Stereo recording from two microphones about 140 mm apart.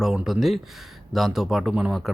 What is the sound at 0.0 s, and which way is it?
Speech, 5° right (ahead or behind).